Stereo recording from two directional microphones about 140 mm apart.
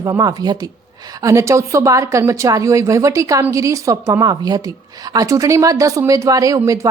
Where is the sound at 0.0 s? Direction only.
25° right (ahead or behind).